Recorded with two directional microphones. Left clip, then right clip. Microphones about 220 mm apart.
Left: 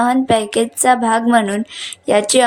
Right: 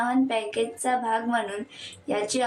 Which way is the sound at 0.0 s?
50° left (ahead or behind).